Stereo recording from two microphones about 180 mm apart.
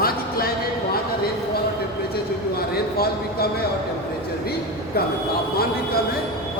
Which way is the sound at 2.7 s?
60° left (ahead or behind).